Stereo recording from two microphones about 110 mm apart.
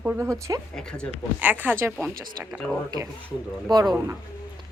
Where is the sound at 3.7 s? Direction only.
40° right (ahead or behind).